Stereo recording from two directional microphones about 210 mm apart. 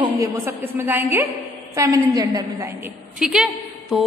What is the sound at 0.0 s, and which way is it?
A woman's voice, 15° right (ahead or behind).